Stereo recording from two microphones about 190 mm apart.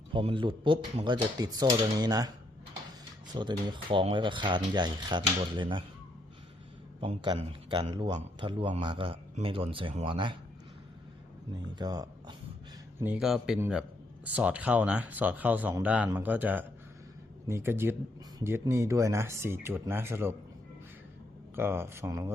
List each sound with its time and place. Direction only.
0.1 s a man's voice: 25° right (ahead or behind)
3.3 s a man's voice: 25° right (ahead or behind)
7.0 s a man's voice: 25° right (ahead or behind)
11.7 s a man's voice: 20° right (ahead or behind)
13.0 s speech: 5° right (ahead or behind)
21.5 s speech: 10° right (ahead or behind)